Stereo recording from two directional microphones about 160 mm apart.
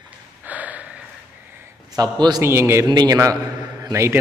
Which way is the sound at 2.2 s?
20° right (ahead or behind).